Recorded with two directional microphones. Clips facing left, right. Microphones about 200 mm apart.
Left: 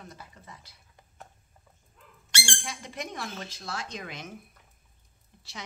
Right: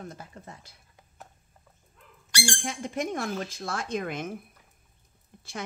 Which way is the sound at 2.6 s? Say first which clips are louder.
Right 7 dB; 45° right (ahead or behind).